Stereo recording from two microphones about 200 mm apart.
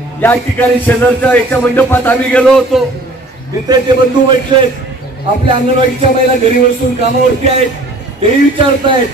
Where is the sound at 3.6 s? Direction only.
20° right (ahead or behind).